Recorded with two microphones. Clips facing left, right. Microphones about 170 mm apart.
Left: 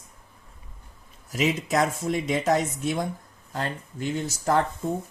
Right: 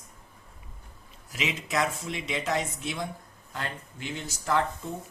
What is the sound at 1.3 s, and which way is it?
Speech, 45° left (ahead or behind).